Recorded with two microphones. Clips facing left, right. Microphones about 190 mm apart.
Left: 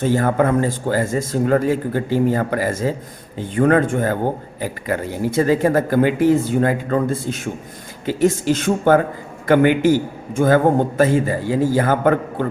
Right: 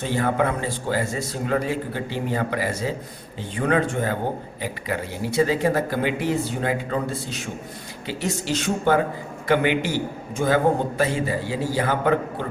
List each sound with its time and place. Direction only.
0.0 s a man's voice: 45° left (ahead or behind)